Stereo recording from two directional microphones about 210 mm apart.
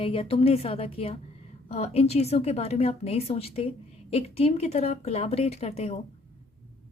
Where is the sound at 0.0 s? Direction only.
25° left (ahead or behind).